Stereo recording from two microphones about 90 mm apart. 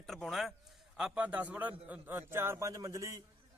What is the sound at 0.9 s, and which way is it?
A man's voice, 10° right (ahead or behind).